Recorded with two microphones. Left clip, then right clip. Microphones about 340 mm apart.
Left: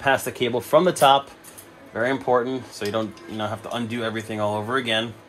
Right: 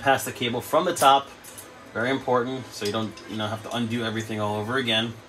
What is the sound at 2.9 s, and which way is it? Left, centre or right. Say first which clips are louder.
Speech: left 4 dB; left.